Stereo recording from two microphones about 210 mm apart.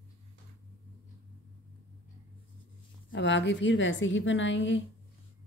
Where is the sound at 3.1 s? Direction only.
60° left (ahead or behind).